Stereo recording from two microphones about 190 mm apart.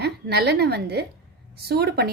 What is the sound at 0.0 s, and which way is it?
A woman's voice, 60° right (ahead or behind).